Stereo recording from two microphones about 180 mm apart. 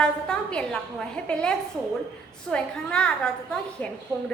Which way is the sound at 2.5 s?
5° left (ahead or behind).